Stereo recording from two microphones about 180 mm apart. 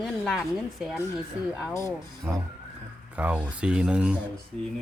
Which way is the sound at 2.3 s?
10° right (ahead or behind).